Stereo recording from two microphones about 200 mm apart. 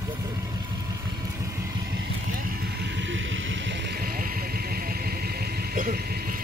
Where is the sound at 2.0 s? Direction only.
45° right (ahead or behind).